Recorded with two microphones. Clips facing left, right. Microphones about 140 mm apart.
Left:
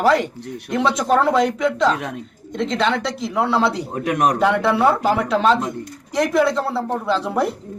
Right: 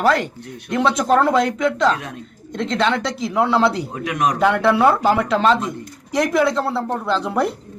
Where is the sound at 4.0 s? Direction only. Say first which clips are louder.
Left 2 dB; 50° left (ahead or behind).